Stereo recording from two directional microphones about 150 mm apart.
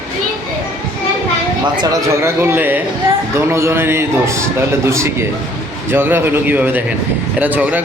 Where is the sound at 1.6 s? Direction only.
25° right (ahead or behind).